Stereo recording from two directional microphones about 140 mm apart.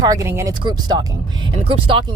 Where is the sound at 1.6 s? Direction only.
40° right (ahead or behind).